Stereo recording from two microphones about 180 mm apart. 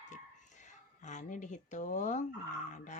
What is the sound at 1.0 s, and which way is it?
Speech, 40° left (ahead or behind).